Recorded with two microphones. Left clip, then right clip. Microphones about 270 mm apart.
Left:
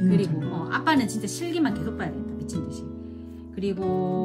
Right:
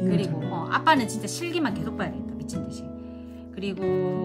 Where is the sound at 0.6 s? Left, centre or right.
Centre.